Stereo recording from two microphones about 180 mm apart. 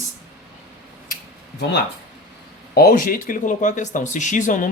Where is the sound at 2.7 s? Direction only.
55° left (ahead or behind).